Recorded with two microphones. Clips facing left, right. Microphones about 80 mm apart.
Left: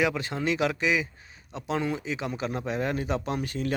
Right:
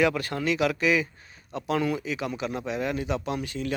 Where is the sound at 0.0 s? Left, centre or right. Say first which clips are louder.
Right 3 dB; centre.